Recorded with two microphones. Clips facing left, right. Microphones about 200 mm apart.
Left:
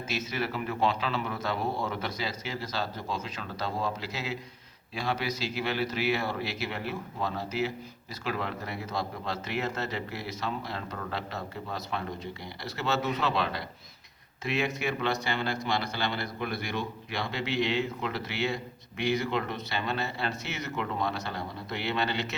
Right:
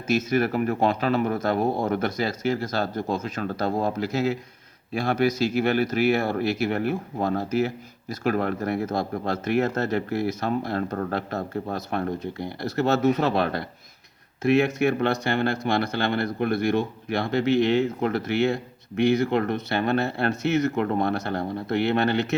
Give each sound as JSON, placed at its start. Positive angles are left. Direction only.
{"t": 0.1, "sound": "speech", "side_deg": -45}